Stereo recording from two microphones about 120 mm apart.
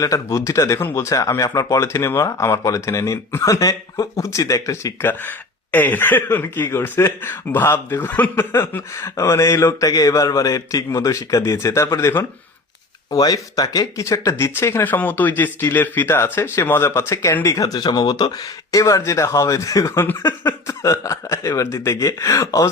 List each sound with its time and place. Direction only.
0.0 s speech: 25° left (ahead or behind)